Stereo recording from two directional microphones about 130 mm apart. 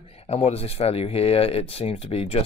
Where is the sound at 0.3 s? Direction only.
50° left (ahead or behind).